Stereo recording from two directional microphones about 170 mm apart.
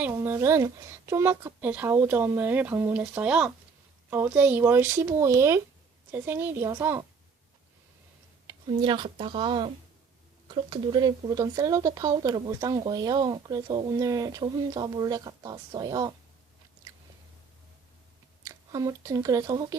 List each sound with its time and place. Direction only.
0.0 s speech: 15° right (ahead or behind)
8.6 s speech: 30° right (ahead or behind)
18.4 s speech: 20° right (ahead or behind)